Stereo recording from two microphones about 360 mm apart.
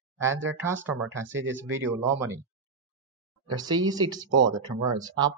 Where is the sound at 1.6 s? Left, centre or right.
Centre.